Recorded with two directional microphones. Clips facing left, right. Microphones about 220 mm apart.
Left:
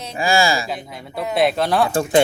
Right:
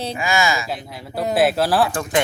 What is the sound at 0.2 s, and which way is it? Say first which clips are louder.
Speech: left 4 dB; 35° left (ahead or behind).